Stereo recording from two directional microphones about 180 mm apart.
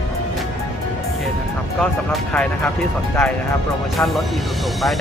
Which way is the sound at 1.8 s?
5° left (ahead or behind).